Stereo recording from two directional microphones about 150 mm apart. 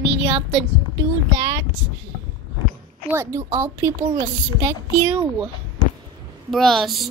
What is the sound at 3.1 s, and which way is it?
A child's voice, 20° right (ahead or behind).